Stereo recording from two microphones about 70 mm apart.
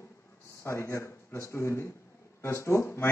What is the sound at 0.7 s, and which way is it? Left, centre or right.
Speech, left.